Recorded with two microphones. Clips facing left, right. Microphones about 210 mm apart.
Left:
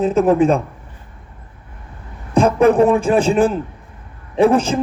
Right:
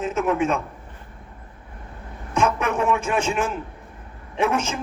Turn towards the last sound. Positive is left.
turn(degrees=35)  # may be behind; listen again after turning